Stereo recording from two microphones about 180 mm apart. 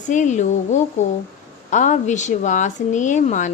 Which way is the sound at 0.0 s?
45° left (ahead or behind).